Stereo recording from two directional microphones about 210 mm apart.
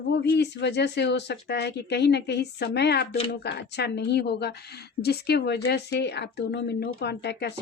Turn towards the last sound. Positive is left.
turn(degrees=55)  # may be behind; listen again after turning